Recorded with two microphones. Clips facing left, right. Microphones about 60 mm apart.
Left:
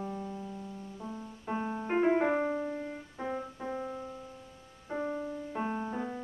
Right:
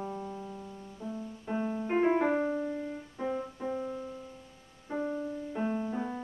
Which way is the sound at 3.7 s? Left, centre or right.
Centre.